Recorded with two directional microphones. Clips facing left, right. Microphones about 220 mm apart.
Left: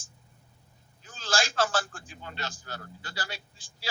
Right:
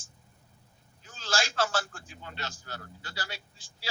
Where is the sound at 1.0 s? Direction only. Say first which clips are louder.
Left 2 dB; 50° left (ahead or behind).